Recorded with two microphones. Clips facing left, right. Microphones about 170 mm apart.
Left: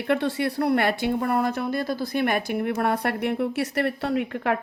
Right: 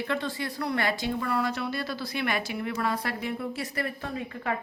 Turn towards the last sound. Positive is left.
turn(degrees=80)